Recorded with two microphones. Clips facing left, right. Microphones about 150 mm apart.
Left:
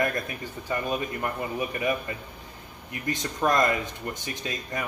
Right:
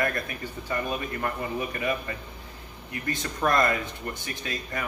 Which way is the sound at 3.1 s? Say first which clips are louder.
Left 1 dB; 20° left (ahead or behind).